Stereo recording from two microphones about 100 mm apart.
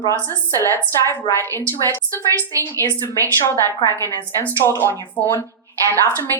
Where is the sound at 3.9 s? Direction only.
35° right (ahead or behind).